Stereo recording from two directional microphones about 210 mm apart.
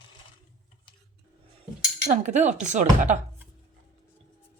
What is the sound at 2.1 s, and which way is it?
Speech, 35° right (ahead or behind).